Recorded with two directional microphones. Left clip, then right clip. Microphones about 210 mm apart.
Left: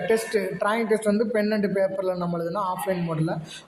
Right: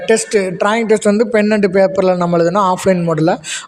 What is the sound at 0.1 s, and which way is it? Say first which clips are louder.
A man's voice: right 11 dB; 45° right (ahead or behind).